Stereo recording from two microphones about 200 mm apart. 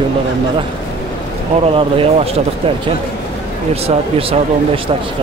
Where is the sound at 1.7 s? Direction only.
25° right (ahead or behind).